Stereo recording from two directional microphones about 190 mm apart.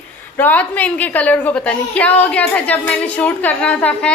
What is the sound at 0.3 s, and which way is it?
A woman's voice, 10° left (ahead or behind).